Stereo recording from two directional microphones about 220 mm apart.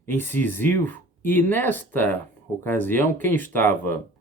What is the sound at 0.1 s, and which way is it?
Speech, 10° left (ahead or behind).